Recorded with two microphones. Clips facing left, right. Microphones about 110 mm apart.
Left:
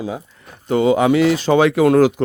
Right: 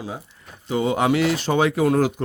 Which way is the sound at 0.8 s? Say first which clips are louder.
Left 7 dB; 65° left (ahead or behind).